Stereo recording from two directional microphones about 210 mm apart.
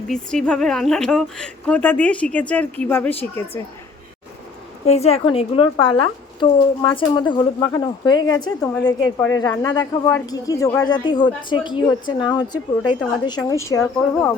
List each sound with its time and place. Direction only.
0.1 s speech: 5° left (ahead or behind)
4.9 s speech: 30° left (ahead or behind)
8.6 s speech: 5° left (ahead or behind)